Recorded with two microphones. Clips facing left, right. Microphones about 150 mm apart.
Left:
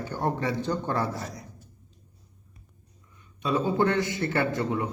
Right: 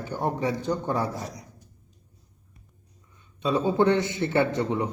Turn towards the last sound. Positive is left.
turn(degrees=-20)  # may be behind; listen again after turning